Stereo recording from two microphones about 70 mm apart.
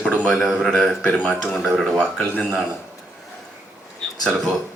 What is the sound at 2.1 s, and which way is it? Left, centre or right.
Speech, centre.